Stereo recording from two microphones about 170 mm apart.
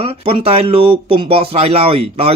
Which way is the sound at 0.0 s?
35° right (ahead or behind).